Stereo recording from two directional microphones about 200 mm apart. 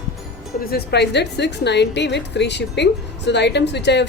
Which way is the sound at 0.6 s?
55° left (ahead or behind).